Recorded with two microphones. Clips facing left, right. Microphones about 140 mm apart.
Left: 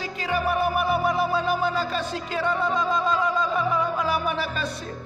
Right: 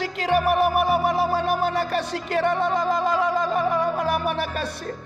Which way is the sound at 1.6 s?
65° right (ahead or behind).